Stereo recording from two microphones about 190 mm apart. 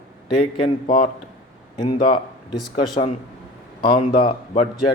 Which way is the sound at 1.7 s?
25° left (ahead or behind).